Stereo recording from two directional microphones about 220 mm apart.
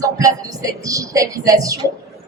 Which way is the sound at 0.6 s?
15° right (ahead or behind).